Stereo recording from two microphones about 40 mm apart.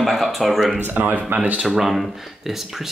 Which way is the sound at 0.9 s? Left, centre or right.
Right.